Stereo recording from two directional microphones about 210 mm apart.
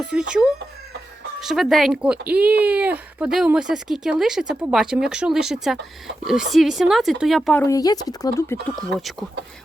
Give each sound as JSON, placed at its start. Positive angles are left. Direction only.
{"t": 0.0, "sound": "speech", "side_deg": -5}
{"t": 7.6, "sound": "speech", "side_deg": 15}
{"t": 8.9, "sound": "speech", "side_deg": 0}